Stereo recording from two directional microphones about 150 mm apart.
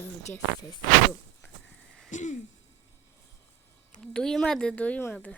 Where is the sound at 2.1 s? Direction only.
55° left (ahead or behind).